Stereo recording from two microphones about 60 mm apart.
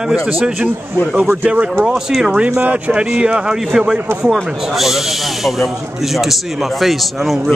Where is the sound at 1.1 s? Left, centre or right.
Right.